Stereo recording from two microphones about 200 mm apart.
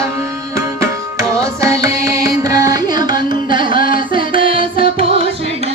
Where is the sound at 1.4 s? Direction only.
15° right (ahead or behind).